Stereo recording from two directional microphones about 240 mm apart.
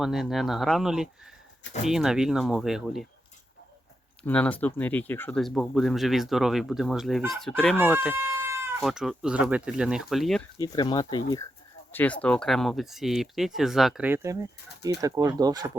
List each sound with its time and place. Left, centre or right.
0.0 s speech: centre
4.2 s speech: centre
7.8 s speech: centre
10.6 s speech: centre